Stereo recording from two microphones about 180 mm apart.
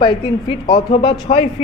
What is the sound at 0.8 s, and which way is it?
Speech, 30° left (ahead or behind).